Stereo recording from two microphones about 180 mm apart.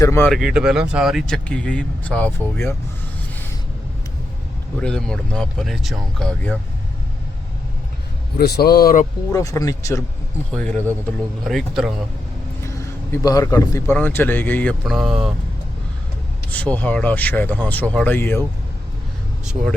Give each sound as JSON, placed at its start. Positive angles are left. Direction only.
{"t": 0.0, "sound": "speech", "side_deg": 15}
{"t": 0.3, "sound": "speech", "side_deg": -5}
{"t": 4.8, "sound": "speech", "side_deg": 5}
{"t": 8.4, "sound": "speech", "side_deg": 60}
{"t": 9.3, "sound": "speech", "side_deg": 20}
{"t": 10.5, "sound": "speech", "side_deg": 5}
{"t": 12.6, "sound": "speech", "side_deg": 15}
{"t": 16.5, "sound": "speech", "side_deg": 10}